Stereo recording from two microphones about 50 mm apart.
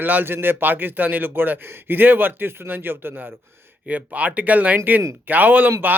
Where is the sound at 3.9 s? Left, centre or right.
Right.